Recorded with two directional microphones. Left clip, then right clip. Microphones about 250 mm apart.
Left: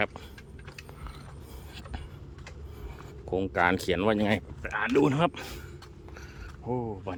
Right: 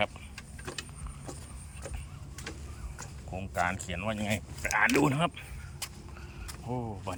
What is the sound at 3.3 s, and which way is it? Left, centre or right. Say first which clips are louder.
Speech: left 6 dB; left.